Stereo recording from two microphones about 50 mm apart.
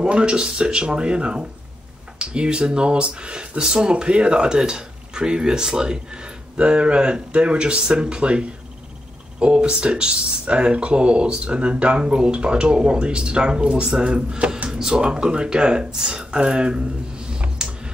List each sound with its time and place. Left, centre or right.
0.0 s speech: right